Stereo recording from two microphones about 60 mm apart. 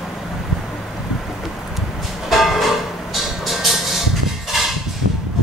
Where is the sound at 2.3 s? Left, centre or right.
Centre.